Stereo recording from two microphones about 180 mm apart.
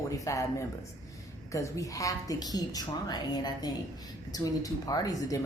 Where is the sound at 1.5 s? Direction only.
15° left (ahead or behind).